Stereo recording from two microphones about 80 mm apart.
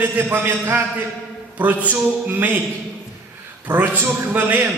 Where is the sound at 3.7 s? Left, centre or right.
Right.